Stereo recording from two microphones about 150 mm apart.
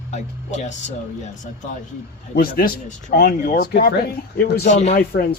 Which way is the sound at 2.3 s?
80° left.